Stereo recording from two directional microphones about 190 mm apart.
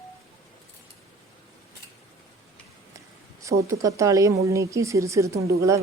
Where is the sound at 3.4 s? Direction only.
15° right (ahead or behind).